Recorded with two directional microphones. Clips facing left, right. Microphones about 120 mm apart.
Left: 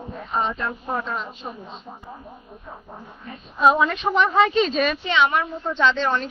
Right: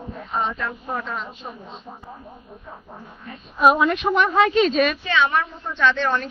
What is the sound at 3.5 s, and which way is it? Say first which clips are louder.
Speech: right 1 dB; 10° right (ahead or behind).